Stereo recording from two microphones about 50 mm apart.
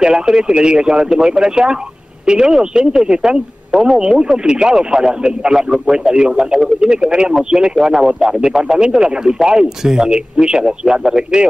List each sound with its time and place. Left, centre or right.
0.0 s speech: centre
4.0 s speech: centre